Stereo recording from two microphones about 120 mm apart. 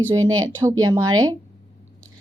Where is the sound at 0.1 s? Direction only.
30° right (ahead or behind).